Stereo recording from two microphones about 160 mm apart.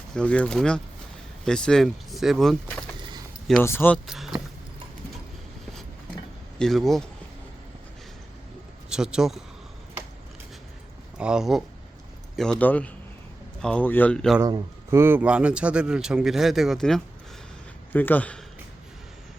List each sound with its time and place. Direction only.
0.1 s a man's voice: 5° left (ahead or behind)
3.6 s speech: 15° left (ahead or behind)
4.0 s a man's voice: centre (ahead or behind)
6.6 s a man's voice: centre (ahead or behind)
8.9 s a man's voice: 5° right (ahead or behind)
11.2 s a man's voice: 5° right (ahead or behind)
14.4 s a man's voice: 20° right (ahead or behind); by 18.4 s 10° left (ahead or behind)